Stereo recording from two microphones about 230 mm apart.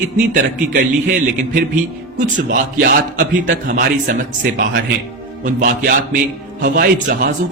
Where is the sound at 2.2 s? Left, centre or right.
Right.